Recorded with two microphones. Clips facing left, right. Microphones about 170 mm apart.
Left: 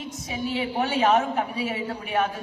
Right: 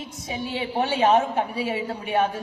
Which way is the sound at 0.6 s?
30° right (ahead or behind).